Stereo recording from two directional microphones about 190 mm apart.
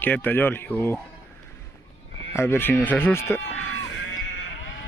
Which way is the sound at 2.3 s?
10° left (ahead or behind).